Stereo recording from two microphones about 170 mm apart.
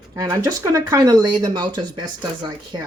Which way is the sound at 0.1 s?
25° right (ahead or behind).